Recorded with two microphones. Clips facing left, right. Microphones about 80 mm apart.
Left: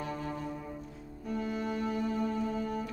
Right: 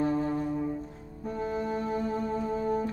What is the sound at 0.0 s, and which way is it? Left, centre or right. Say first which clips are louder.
Music: right 10 dB; right.